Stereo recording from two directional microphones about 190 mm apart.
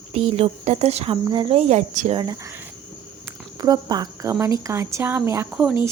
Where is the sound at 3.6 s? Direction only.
20° right (ahead or behind).